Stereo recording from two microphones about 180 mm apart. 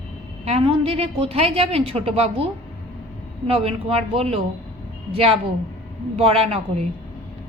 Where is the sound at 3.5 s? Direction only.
35° right (ahead or behind).